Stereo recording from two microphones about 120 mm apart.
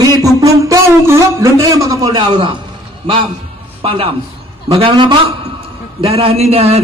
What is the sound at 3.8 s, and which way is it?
A man's voice, 50° right (ahead or behind).